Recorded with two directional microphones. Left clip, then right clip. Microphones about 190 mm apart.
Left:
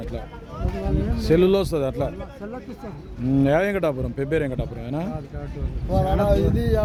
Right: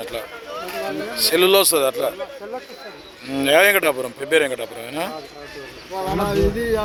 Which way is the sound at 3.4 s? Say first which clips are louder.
Right 7 dB; 5° right (ahead or behind).